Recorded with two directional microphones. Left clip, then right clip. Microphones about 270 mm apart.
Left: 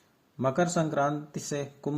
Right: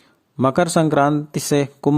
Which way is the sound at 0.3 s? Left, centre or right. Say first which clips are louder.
Right 10 dB; right.